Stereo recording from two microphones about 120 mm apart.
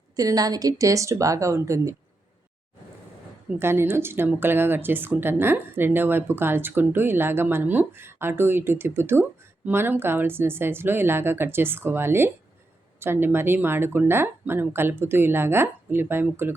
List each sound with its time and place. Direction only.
0.2 s speech: 30° right (ahead or behind)
3.6 s speech: 20° right (ahead or behind)